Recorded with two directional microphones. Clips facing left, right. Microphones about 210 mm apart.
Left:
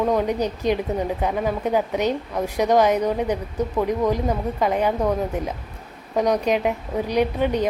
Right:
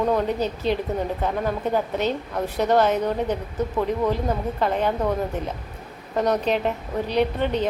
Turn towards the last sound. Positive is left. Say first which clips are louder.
# left 1 dB
turn(degrees=10)  # may be behind; listen again after turning